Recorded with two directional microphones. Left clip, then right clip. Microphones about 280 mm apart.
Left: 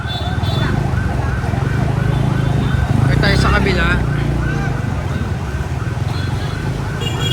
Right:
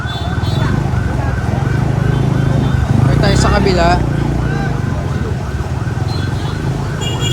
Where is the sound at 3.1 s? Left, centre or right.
Centre.